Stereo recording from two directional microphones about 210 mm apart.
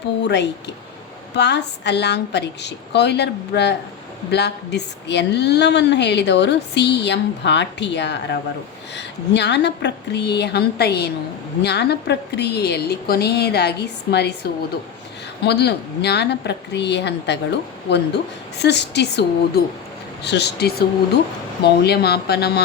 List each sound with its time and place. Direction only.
0.2 s a woman's voice: 55° left (ahead or behind)